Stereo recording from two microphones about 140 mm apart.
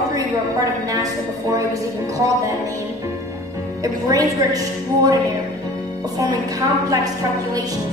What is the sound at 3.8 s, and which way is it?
Music, 25° right (ahead or behind).